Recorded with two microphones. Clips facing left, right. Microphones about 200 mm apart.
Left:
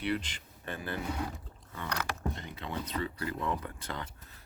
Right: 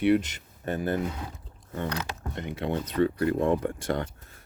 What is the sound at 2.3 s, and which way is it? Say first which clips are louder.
Speech: right 9 dB; 60° right (ahead or behind).